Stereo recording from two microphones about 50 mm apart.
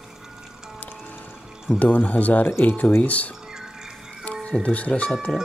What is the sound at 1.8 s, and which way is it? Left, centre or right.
Speech, left.